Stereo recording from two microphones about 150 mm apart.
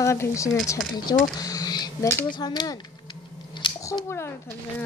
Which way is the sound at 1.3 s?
25° left (ahead or behind).